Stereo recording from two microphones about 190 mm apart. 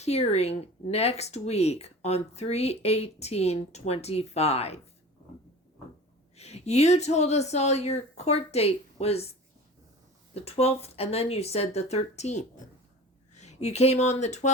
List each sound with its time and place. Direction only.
0.0 s speech: 35° left (ahead or behind)
6.3 s speech: 35° left (ahead or behind)
10.3 s speech: 30° left (ahead or behind)